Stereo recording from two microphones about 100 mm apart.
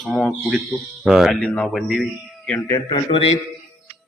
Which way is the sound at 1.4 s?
5° left (ahead or behind).